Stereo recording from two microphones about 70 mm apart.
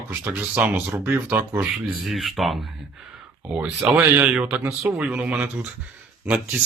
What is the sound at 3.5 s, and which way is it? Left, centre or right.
Speech, centre.